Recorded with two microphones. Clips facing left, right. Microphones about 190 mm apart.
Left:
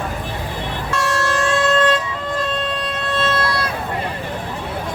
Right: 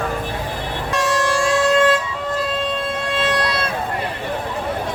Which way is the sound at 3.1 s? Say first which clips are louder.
Left 1 dB; 15° right (ahead or behind).